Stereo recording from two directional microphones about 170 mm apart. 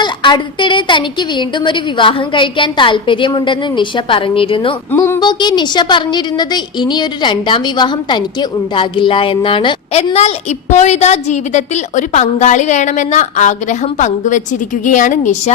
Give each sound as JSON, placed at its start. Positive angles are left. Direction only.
{"t": 0.0, "sound": "a woman's voice", "side_deg": 25}
{"t": 4.9, "sound": "speech", "side_deg": 15}
{"t": 5.2, "sound": "a woman's voice", "side_deg": 25}